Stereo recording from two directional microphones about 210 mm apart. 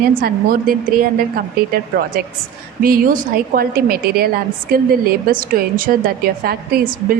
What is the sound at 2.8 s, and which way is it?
A woman's voice, 45° right (ahead or behind).